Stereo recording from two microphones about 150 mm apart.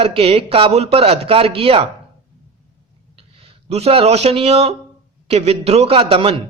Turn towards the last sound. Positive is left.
turn(degrees=-35)  # may be behind; listen again after turning